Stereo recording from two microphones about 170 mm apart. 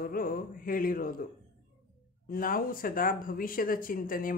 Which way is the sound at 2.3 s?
55° left (ahead or behind).